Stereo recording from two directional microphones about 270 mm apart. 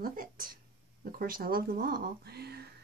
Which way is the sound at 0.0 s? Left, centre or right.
Right.